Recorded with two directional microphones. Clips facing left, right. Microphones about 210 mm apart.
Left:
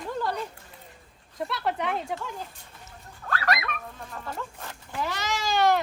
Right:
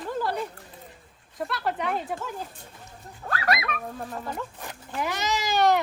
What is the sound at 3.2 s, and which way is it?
Fowl, 30° right (ahead or behind).